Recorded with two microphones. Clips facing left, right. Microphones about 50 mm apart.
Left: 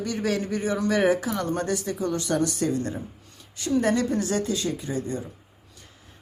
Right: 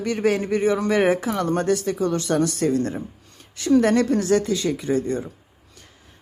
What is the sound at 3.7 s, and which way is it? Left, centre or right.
A woman's voice, right.